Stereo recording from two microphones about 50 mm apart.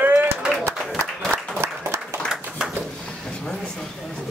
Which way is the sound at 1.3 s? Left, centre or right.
Right.